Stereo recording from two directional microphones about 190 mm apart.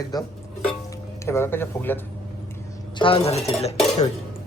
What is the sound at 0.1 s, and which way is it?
Speech, 20° left (ahead or behind).